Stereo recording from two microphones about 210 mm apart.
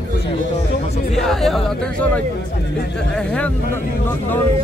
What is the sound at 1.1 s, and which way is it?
Speech, centre (ahead or behind).